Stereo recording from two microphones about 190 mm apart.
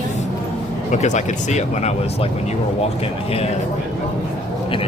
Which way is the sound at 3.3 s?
30° left (ahead or behind).